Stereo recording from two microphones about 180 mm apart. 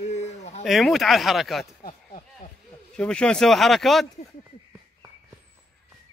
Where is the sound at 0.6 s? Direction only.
Centre (ahead or behind).